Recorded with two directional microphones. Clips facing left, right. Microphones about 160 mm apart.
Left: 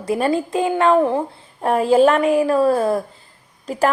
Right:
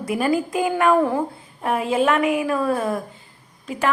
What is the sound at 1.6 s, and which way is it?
A woman's voice, 35° left (ahead or behind).